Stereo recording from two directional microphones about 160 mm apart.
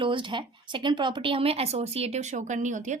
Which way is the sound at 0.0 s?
30° right (ahead or behind).